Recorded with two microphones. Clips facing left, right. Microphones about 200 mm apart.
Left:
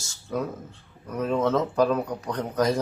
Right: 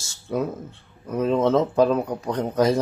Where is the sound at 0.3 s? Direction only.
20° right (ahead or behind).